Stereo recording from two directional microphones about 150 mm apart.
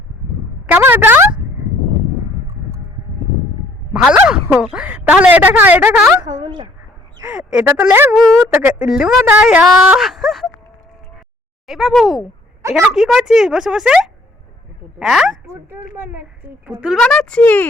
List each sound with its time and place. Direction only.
0.7 s a sound: 15° right (ahead or behind)
3.9 s speech: 5° right (ahead or behind)
6.2 s speech: 25° right (ahead or behind)
7.3 s a woman's voice: 5° right (ahead or behind)
11.6 s a woman's voice: centre (ahead or behind)
15.4 s a woman's voice: 15° right (ahead or behind)
17.0 s speech: 5° left (ahead or behind)